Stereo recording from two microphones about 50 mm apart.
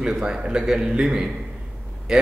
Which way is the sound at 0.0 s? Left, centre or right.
Centre.